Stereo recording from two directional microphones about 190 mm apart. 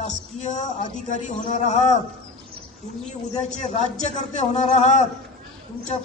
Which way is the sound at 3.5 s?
40° left (ahead or behind).